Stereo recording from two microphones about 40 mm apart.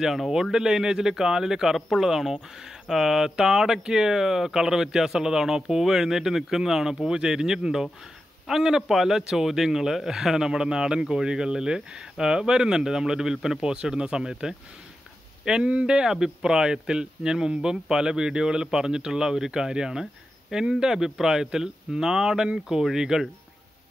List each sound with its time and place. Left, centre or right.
0.3 s a man's voice: centre